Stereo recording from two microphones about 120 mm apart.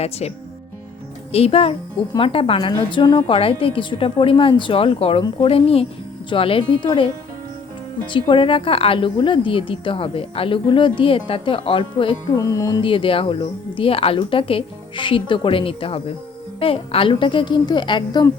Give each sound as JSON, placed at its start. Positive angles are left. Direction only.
{"t": 0.0, "sound": "a woman's voice", "side_deg": 60}
{"t": 8.1, "sound": "a woman's voice", "side_deg": 45}
{"t": 12.4, "sound": "music", "side_deg": 30}
{"t": 12.8, "sound": "a woman's voice", "side_deg": 45}